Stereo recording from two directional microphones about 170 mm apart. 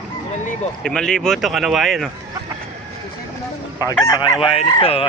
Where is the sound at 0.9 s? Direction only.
5° left (ahead or behind).